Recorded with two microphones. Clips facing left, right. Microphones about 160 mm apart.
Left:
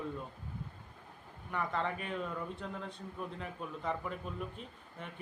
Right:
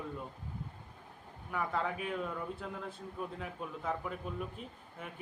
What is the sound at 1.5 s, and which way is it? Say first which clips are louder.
A man's voice: right 1 dB; 5° right (ahead or behind).